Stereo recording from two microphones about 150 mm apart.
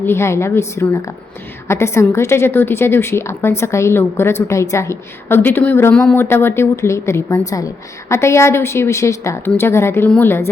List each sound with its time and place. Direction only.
0.0 s a woman's voice: 15° left (ahead or behind)